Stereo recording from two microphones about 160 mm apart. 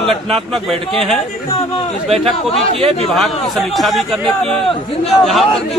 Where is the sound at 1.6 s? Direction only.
40° left (ahead or behind).